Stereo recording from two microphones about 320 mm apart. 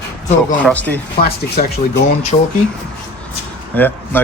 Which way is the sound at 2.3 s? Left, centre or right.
Centre.